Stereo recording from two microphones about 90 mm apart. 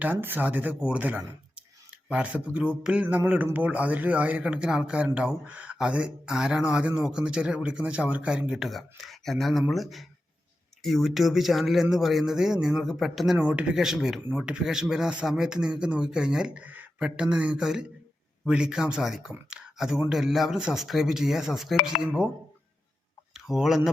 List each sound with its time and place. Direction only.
0.0 s speech: 20° right (ahead or behind); by 13.4 s 5° right (ahead or behind)
13.4 s speech: 15° right (ahead or behind)
23.3 s speech: 5° right (ahead or behind)